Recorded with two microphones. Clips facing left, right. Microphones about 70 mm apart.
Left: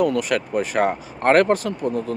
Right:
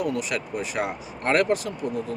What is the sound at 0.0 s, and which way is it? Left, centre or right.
Speech, left.